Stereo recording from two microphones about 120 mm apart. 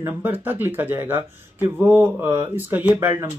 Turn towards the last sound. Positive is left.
turn(degrees=-20)  # may be behind; listen again after turning